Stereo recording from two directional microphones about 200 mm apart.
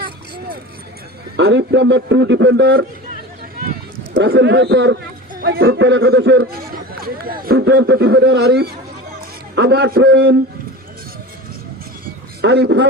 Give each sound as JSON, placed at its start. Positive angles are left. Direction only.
{"t": 1.4, "sound": "a man's voice", "side_deg": -60}
{"t": 4.1, "sound": "a man's voice", "side_deg": -55}
{"t": 5.3, "sound": "a sound", "side_deg": -50}
{"t": 5.6, "sound": "a man's voice", "side_deg": -60}
{"t": 12.4, "sound": "a man's voice", "side_deg": -55}